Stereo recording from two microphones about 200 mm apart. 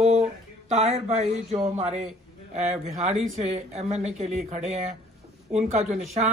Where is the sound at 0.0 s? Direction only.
35° right (ahead or behind).